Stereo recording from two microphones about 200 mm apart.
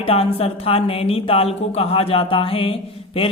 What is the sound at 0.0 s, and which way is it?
A man's voice, 30° left (ahead or behind).